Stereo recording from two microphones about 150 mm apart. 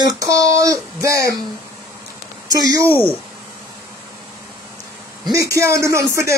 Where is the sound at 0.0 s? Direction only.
25° right (ahead or behind).